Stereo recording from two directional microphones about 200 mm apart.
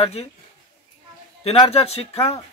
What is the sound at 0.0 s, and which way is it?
Speech, 30° left (ahead or behind).